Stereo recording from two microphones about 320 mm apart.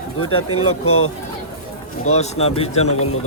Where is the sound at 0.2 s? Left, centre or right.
Left.